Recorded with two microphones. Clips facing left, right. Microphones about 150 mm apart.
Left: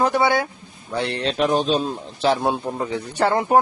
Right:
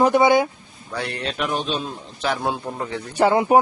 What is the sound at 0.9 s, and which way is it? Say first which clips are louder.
Speech: left 4 dB; 25° left (ahead or behind).